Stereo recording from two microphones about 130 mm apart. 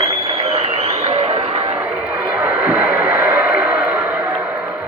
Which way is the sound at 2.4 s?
10° right (ahead or behind).